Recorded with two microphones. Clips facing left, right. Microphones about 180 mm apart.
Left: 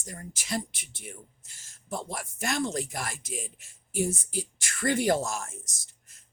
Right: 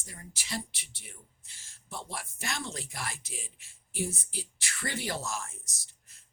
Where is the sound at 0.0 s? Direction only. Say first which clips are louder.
Left 7 dB; 45° left (ahead or behind).